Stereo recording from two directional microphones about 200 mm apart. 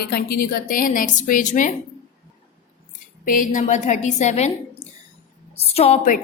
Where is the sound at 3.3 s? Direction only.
40° left (ahead or behind).